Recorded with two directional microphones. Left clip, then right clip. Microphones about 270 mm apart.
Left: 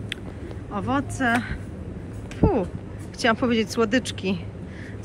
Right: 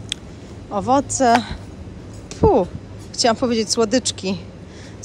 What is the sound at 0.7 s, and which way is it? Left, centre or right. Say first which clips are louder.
Speech: right 9 dB; centre.